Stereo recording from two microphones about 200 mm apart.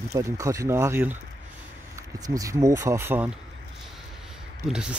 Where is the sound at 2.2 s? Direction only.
15° right (ahead or behind).